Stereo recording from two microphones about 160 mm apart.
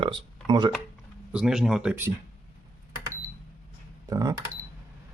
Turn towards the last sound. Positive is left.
turn(degrees=-20)  # may be behind; listen again after turning